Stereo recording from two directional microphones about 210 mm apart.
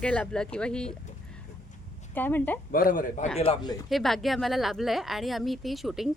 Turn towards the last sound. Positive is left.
turn(degrees=0)  # may be behind; listen again after turning